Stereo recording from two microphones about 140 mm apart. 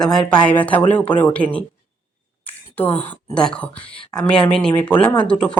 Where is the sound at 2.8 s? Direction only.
10° left (ahead or behind).